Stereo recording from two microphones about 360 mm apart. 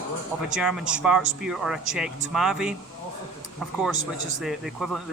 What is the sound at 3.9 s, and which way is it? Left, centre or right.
Speech, right.